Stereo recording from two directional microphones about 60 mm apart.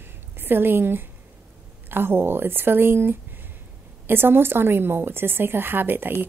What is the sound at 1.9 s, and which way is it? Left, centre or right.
Speech, right.